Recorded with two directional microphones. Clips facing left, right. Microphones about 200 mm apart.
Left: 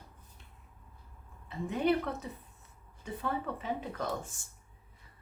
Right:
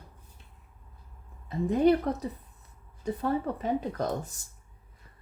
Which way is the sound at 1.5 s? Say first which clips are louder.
Right 7 dB; 40° right (ahead or behind).